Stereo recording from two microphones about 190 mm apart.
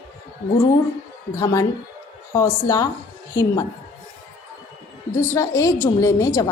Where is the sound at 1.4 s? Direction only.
15° left (ahead or behind).